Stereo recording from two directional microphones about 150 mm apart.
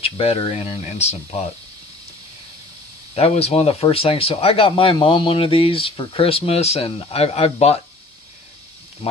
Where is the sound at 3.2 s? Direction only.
45° left (ahead or behind).